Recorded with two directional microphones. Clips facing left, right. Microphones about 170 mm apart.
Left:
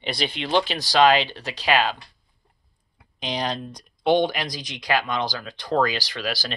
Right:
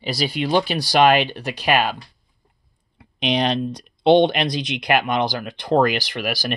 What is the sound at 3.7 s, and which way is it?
Speech, 25° right (ahead or behind).